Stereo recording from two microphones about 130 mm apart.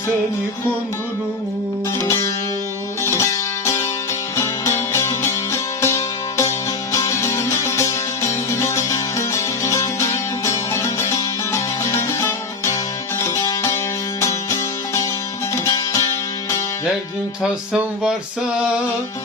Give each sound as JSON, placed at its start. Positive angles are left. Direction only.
{"t": 2.0, "sound": "music", "side_deg": 20}
{"t": 17.4, "sound": "music", "side_deg": -5}